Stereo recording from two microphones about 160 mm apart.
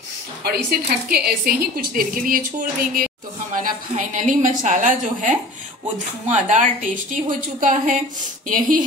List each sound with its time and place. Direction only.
0.7 s a woman's voice: 70° right (ahead or behind)